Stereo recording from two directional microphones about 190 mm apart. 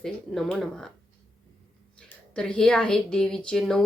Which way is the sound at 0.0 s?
Centre (ahead or behind).